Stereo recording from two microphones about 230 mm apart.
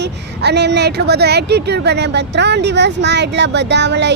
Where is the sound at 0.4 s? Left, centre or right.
Right.